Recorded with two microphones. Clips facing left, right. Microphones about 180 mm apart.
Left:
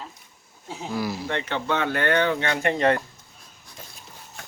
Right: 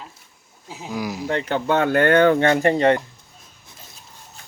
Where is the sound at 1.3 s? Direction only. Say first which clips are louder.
Right 8 dB; 40° right (ahead or behind).